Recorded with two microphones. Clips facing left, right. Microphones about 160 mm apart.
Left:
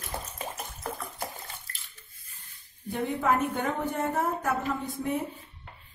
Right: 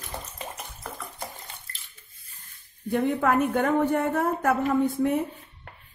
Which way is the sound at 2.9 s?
60° right (ahead or behind).